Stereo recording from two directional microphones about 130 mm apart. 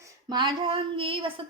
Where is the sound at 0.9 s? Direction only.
45° right (ahead or behind).